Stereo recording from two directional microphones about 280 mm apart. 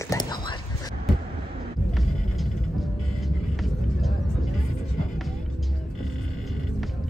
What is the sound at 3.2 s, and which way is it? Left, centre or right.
Vehicle, centre.